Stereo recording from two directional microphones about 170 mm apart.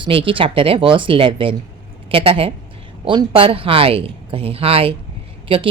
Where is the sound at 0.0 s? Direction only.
30° right (ahead or behind).